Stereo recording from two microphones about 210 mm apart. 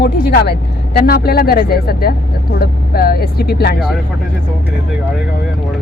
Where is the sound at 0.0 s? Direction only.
50° left (ahead or behind).